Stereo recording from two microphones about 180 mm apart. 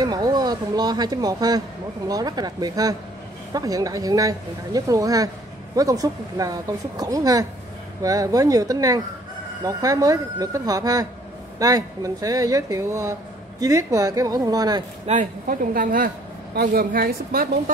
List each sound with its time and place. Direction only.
0.0 s speech: 20° right (ahead or behind)
15.0 s a woman's voice: 50° right (ahead or behind)